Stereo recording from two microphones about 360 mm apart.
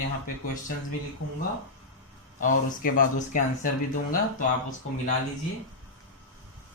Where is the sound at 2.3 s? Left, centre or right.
Left.